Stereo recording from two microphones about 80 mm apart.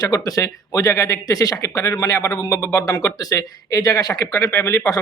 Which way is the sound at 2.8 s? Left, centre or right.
Left.